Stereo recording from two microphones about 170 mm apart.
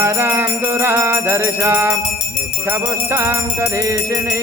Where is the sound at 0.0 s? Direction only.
15° right (ahead or behind).